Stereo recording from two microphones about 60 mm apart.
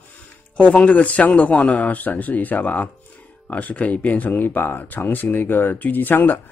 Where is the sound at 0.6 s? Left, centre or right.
Left.